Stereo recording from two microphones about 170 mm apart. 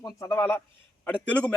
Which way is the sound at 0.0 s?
20° left (ahead or behind).